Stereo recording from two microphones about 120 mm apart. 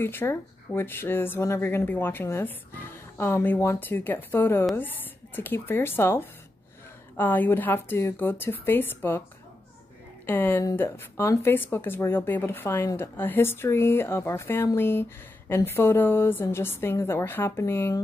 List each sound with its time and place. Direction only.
0.0 s a woman's voice: 20° left (ahead or behind)
10.2 s a woman's voice: 15° left (ahead or behind)